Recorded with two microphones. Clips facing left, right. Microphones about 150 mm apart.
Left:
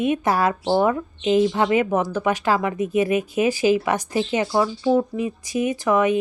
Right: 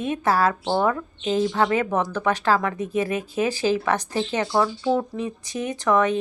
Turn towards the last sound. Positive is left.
turn(degrees=10)  # may be behind; listen again after turning